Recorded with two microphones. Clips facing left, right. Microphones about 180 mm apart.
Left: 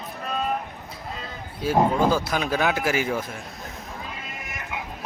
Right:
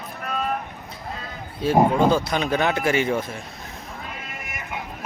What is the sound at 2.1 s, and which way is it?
Speech, 5° left (ahead or behind).